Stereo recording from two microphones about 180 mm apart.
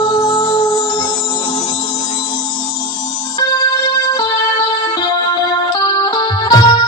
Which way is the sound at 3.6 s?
20° left (ahead or behind).